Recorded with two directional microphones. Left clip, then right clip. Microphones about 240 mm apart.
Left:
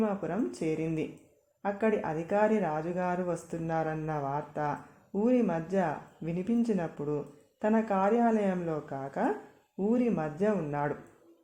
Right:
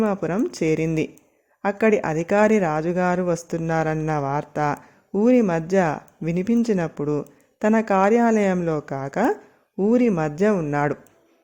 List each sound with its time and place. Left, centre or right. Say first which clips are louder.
0.0 s speech: right 9 dB; right